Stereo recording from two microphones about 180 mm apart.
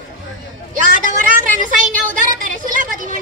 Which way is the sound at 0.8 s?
45° right (ahead or behind).